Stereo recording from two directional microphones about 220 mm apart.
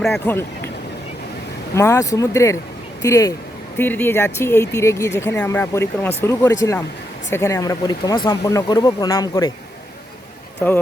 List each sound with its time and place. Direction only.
0.0 s speech: 5° left (ahead or behind)
1.7 s speech: 15° left (ahead or behind)